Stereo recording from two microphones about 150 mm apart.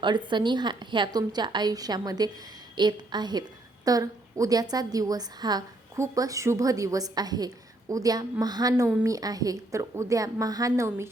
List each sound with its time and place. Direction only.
0.0 s a woman's voice: 30° right (ahead or behind)